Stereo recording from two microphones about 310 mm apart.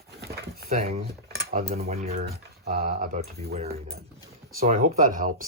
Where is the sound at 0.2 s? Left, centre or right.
Right.